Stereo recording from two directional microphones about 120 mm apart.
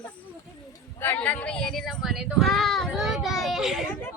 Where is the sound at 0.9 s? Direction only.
15° left (ahead or behind); by 3.8 s 5° right (ahead or behind).